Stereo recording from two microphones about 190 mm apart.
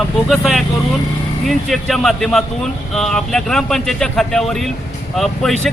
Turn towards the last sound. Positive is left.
turn(degrees=0)  # may be behind; listen again after turning